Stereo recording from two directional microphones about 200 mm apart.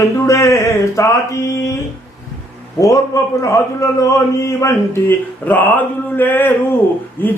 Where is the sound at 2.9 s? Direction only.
15° left (ahead or behind).